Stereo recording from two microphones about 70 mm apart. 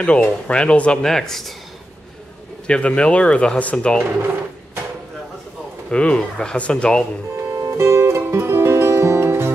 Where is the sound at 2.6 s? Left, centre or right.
Centre.